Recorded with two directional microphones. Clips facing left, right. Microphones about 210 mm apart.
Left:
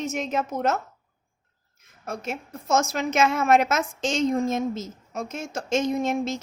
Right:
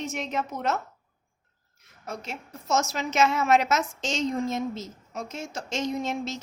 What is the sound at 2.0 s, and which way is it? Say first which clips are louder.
A woman's voice: left 5 dB; 50° left (ahead or behind).